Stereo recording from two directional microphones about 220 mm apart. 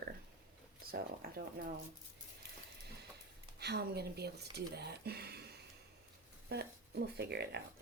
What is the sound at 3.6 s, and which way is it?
Speech, 50° right (ahead or behind).